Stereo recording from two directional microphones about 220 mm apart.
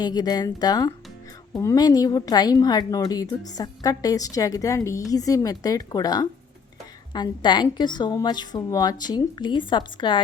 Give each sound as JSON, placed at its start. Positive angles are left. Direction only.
{"t": 0.0, "sound": "a woman's voice", "side_deg": 20}